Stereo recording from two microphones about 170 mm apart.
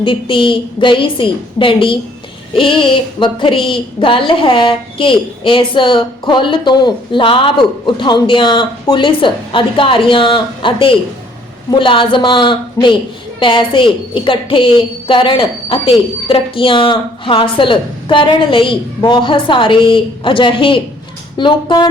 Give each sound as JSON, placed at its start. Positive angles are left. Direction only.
{"t": 0.0, "sound": "a woman's voice", "side_deg": 30}